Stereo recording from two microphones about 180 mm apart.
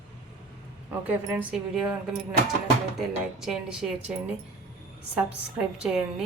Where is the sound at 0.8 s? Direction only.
10° right (ahead or behind).